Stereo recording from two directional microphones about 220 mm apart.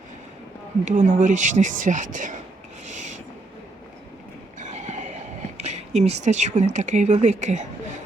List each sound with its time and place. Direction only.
0.9 s speech: 35° right (ahead or behind)
2.8 s owl: 35° right (ahead or behind)
4.6 s a sound: 35° right (ahead or behind)
6.7 s speech: 35° right (ahead or behind)